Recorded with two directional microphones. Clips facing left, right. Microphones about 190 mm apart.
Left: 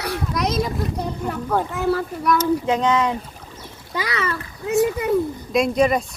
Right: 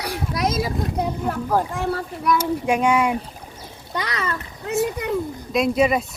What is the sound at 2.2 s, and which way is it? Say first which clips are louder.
Speech: left 1 dB; 10° right (ahead or behind).